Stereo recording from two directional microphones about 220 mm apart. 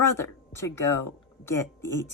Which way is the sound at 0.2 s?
10° left (ahead or behind).